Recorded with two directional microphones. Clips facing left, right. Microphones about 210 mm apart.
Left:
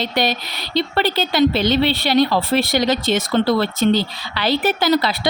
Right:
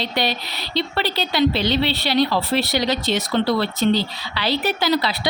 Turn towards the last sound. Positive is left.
turn(degrees=50)  # may be behind; listen again after turning